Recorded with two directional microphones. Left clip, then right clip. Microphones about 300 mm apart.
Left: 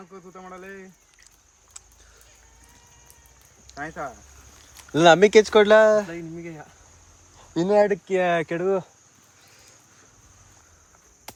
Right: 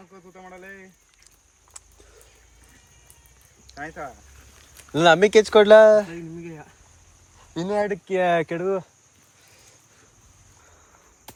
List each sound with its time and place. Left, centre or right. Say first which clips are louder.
0.1 s a sound: left 1 dB; left
3.8 s speech: left 2 dB; left
4.9 s speech: left 1 dB; centre
7.7 s speech: left 5 dB; centre